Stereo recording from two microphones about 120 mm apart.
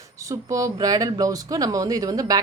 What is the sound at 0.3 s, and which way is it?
Speech, 30° right (ahead or behind).